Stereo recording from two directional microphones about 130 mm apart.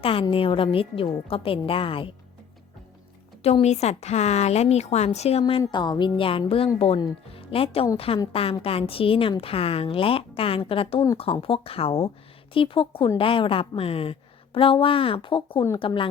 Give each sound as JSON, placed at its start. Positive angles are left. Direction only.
{"t": 0.0, "sound": "a woman's voice", "side_deg": 45}
{"t": 3.4, "sound": "a woman's voice", "side_deg": 55}